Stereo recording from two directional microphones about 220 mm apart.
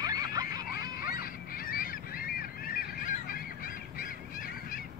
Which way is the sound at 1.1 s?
40° left (ahead or behind).